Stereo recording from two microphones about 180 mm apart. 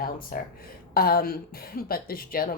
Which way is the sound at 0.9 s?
55° left (ahead or behind).